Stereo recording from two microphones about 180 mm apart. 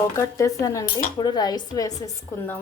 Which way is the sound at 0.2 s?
20° left (ahead or behind).